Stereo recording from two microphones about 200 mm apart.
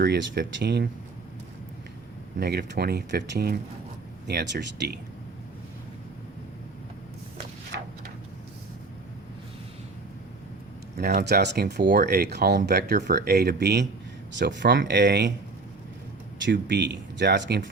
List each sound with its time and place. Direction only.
0.0 s speech: 55° right (ahead or behind)
2.4 s speech: 50° right (ahead or behind)
7.7 s a sound: 60° right (ahead or behind)
10.9 s speech: 50° right (ahead or behind)
16.4 s speech: 60° right (ahead or behind)